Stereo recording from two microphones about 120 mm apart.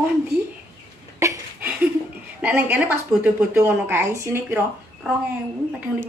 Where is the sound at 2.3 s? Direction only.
15° right (ahead or behind).